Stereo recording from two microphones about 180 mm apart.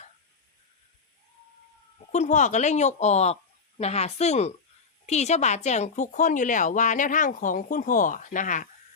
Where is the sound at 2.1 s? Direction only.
40° left (ahead or behind).